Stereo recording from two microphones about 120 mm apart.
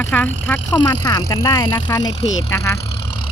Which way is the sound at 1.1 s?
30° left (ahead or behind).